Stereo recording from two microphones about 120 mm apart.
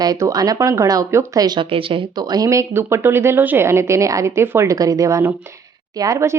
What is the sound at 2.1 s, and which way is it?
Speech, 35° right (ahead or behind).